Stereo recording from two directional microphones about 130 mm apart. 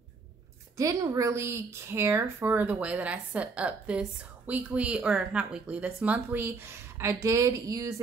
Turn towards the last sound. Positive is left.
turn(degrees=-25)  # may be behind; listen again after turning